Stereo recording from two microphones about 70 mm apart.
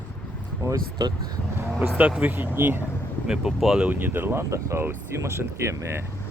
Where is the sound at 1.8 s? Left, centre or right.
Right.